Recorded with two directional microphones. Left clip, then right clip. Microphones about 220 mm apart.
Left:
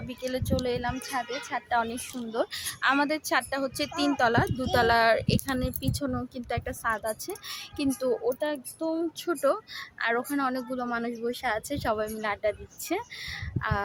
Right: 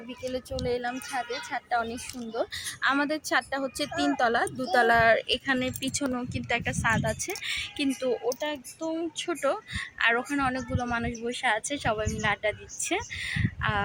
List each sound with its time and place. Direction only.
0.6 s a woman's voice: 15° left (ahead or behind)
9.4 s a woman's voice: 10° left (ahead or behind)